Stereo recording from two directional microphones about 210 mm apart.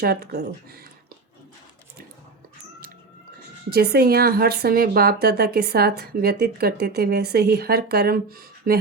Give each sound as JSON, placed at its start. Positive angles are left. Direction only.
{"t": 0.0, "sound": "a woman's voice", "side_deg": -50}
{"t": 3.7, "sound": "a woman's voice", "side_deg": -45}